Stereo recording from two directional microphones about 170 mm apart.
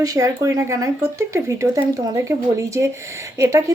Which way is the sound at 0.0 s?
20° right (ahead or behind).